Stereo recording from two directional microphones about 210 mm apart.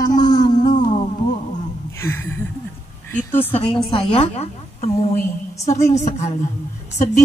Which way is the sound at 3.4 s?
30° left (ahead or behind).